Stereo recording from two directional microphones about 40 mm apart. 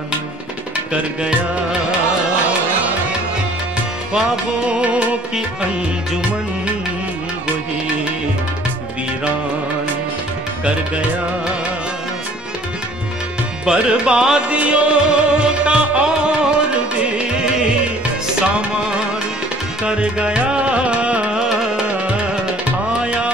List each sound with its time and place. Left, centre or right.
4.6 s music: right
13.7 s music: right
19.9 s music: right
22.9 s music: right